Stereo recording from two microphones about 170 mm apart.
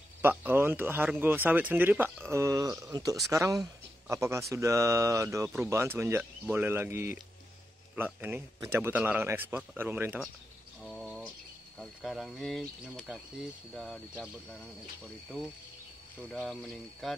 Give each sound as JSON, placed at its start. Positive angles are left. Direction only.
{"t": 0.2, "sound": "speech", "side_deg": -10}
{"t": 10.8, "sound": "cricket", "side_deg": 0}
{"t": 11.8, "sound": "speech", "side_deg": 0}
{"t": 16.4, "sound": "speech", "side_deg": 0}